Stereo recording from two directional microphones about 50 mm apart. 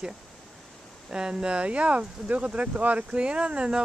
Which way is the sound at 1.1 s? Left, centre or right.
Centre.